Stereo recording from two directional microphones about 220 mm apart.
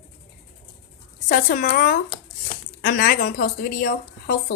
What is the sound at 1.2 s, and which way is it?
Speech, 40° left (ahead or behind).